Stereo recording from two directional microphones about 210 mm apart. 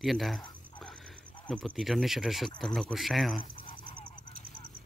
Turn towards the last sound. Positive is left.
turn(degrees=25)  # may be behind; listen again after turning